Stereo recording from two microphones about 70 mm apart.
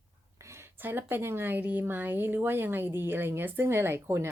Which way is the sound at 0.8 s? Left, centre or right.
Right.